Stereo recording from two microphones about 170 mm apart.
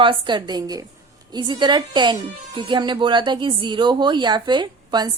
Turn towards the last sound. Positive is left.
turn(degrees=-25)  # may be behind; listen again after turning